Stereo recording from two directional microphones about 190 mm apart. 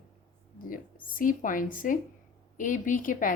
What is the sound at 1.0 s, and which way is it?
A woman's voice, 45° left (ahead or behind).